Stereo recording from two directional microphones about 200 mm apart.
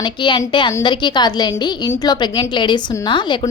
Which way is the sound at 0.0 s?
20° left (ahead or behind).